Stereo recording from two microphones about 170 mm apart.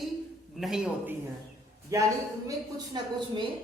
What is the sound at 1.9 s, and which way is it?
A woman's voice, 20° right (ahead or behind).